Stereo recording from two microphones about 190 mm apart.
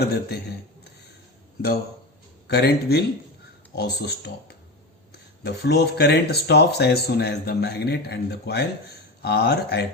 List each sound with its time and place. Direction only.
0.1 s speech: 55° left (ahead or behind)
2.5 s speech: 60° left (ahead or behind)